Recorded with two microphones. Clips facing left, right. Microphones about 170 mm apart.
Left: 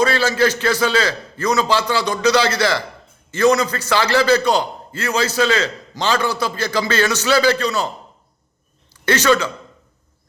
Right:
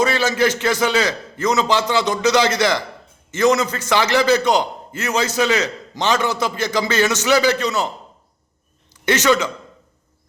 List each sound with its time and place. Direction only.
0.0 s a man's voice: 20° right (ahead or behind)
8.9 s speech: 20° right (ahead or behind)